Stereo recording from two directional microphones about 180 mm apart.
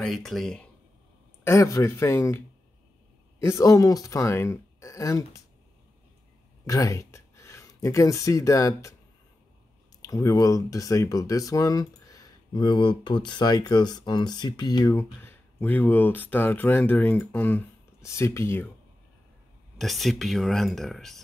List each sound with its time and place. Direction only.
0.0 s speech: centre (ahead or behind)
1.4 s speech: 15° left (ahead or behind)
6.6 s speech: 20° left (ahead or behind)
10.0 s speech: 20° left (ahead or behind)
19.8 s speech: centre (ahead or behind)